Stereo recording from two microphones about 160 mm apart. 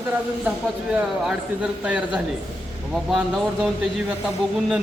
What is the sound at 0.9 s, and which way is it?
Speech, 5° right (ahead or behind).